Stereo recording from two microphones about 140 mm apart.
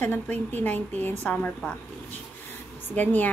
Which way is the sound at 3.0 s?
10° left (ahead or behind).